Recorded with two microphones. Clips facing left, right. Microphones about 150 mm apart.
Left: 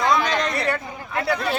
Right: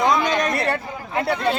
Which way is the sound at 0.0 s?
20° right (ahead or behind).